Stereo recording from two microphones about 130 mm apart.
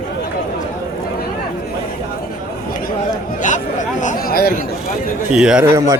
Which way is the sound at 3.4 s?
75° left (ahead or behind).